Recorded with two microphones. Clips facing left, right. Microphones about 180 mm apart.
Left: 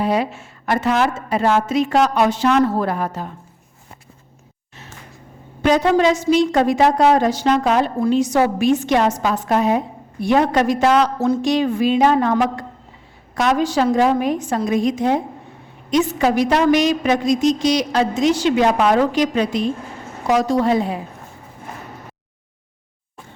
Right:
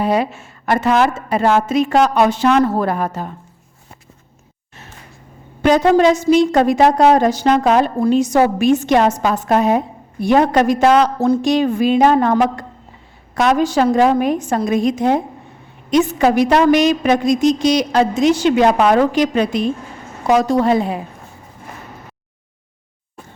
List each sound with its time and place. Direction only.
0.0 s a woman's voice: 50° right (ahead or behind)
5.6 s a woman's voice: 50° right (ahead or behind)